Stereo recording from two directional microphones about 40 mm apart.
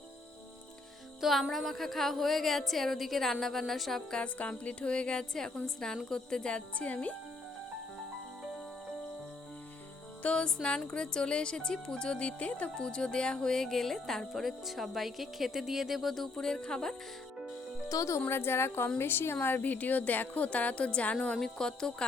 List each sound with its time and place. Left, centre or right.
1.2 s speech: centre
4.2 s a woman's voice: left; by 6.6 s centre
6.7 s a woman's voice: left
10.2 s a woman's voice: left
12.7 s speech: left; by 16.3 s centre
16.3 s a woman's voice: centre
18.3 s a woman's voice: left
19.6 s a woman's voice: left
21.6 s a woman's voice: centre